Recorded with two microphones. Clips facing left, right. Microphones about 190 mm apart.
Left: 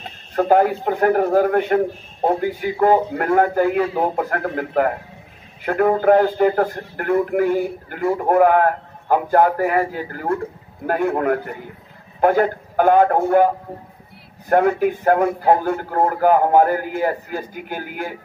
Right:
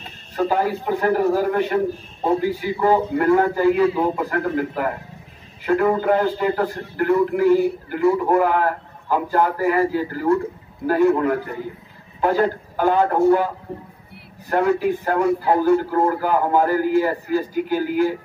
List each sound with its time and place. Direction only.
0.0 s a man's voice: 55° left (ahead or behind)
14.5 s a man's voice: 55° left (ahead or behind)